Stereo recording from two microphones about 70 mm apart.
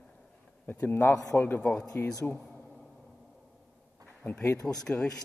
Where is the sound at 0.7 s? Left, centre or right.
Left.